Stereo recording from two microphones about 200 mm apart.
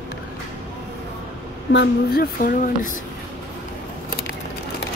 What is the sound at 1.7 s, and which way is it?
Speech, 55° left (ahead or behind).